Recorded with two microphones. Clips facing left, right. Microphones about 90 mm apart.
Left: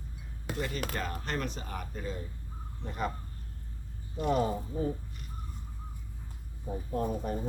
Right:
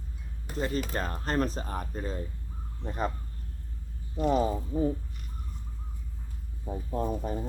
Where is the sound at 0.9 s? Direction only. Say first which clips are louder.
Right 5 dB; 35° right (ahead or behind).